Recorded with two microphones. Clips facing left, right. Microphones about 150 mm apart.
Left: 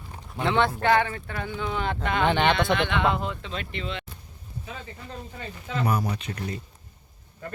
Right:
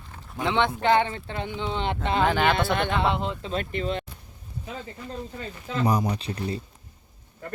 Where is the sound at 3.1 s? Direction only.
25° right (ahead or behind).